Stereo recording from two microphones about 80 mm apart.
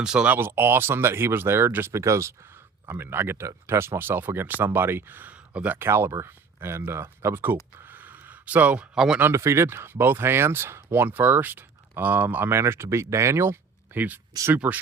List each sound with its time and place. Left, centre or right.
0.0 s speech: centre
0.3 s speech: right
5.8 s speech: right
9.3 s speech: right